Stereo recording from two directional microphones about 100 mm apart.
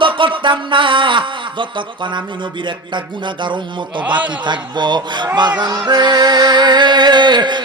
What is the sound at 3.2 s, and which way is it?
Music, 50° right (ahead or behind).